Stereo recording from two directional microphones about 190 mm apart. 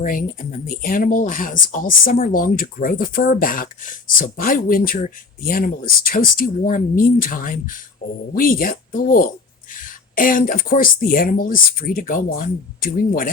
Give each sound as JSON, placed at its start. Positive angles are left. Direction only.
{"t": 0.0, "sound": "speech", "side_deg": 45}